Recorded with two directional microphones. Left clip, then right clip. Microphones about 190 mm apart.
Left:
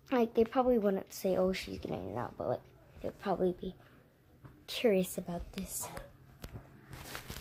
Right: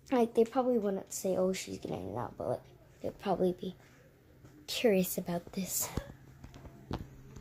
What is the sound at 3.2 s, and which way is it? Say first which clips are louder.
A woman's voice: right 1 dB; 10° right (ahead or behind).